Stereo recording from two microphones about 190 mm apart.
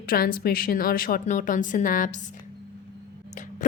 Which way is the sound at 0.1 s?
50° left (ahead or behind).